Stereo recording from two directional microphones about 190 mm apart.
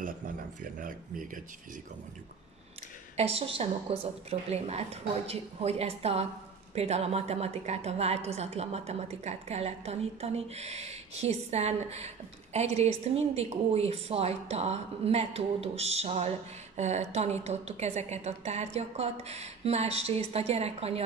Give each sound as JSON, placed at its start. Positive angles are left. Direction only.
{"t": 0.6, "sound": "speech", "side_deg": -45}
{"t": 3.2, "sound": "a woman's voice", "side_deg": -30}